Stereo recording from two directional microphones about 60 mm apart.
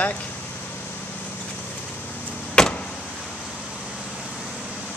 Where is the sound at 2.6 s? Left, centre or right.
Centre.